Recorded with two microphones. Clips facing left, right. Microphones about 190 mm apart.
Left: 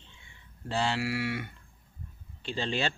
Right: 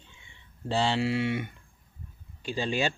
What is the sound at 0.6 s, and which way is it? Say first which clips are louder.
A man's voice: right 4 dB; 30° right (ahead or behind).